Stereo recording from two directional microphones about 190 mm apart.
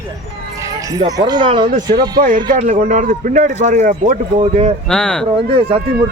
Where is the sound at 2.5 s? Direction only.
40° right (ahead or behind).